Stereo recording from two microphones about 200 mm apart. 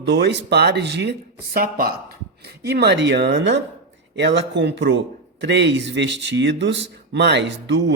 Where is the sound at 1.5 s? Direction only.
50° right (ahead or behind).